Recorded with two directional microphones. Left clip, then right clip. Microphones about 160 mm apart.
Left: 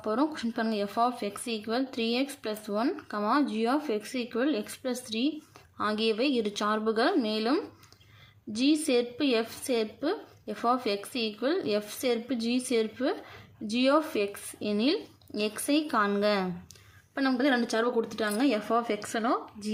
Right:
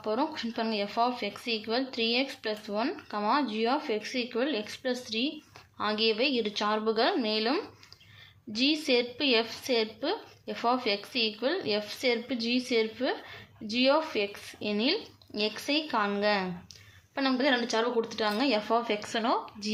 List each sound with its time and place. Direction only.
0.0 s a woman's voice: 35° left (ahead or behind)
19.1 s speech: centre (ahead or behind)